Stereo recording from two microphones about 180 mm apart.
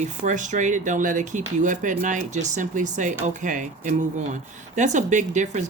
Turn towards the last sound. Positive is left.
turn(degrees=-40)  # may be behind; listen again after turning